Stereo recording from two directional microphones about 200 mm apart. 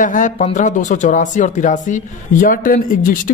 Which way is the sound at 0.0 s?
40° left (ahead or behind).